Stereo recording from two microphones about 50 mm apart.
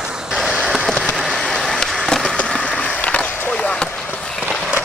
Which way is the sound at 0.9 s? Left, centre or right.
Centre.